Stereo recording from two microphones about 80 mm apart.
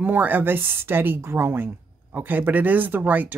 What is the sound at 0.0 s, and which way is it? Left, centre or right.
A woman's voice, right.